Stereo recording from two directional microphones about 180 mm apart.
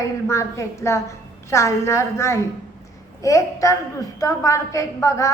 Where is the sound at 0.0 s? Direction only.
15° left (ahead or behind).